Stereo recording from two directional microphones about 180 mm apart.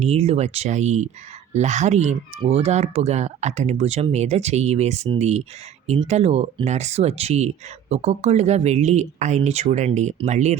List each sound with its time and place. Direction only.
0.0 s speech: 35° right (ahead or behind)